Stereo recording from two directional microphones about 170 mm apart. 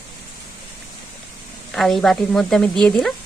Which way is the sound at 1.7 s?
Centre (ahead or behind).